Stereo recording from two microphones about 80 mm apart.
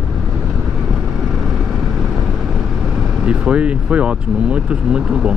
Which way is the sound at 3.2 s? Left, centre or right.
Centre.